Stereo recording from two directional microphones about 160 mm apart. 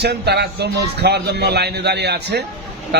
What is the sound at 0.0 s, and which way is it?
A man's voice, 90° right.